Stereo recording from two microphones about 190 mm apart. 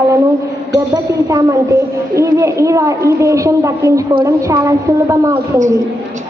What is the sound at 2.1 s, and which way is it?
A child's voice, 15° right (ahead or behind).